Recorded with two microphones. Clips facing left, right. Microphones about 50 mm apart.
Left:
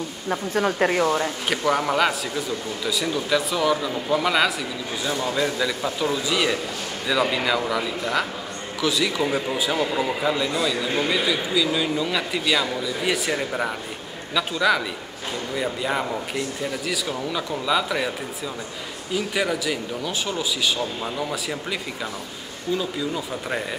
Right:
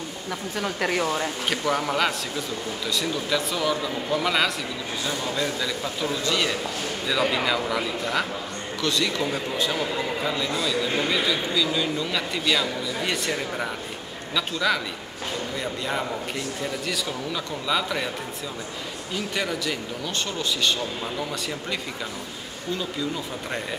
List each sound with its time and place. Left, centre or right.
0.3 s speech: left
0.8 s a man's voice: centre
19.1 s a man's voice: centre